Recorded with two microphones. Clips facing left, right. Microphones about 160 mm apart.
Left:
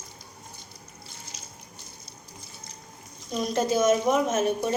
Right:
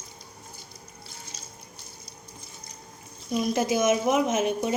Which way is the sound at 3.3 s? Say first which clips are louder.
Right 1 dB; 10° right (ahead or behind).